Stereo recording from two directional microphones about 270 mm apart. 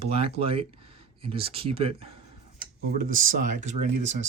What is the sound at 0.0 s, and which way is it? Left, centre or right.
Speech, right.